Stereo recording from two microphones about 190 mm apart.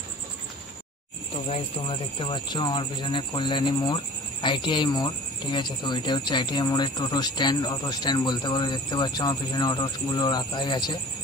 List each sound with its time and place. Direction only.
1.5 s speech: 30° left (ahead or behind)